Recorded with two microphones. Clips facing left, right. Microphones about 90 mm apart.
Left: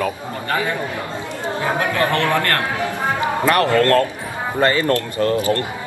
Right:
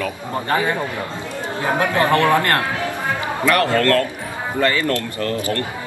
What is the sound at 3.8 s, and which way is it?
Speech, 25° left (ahead or behind).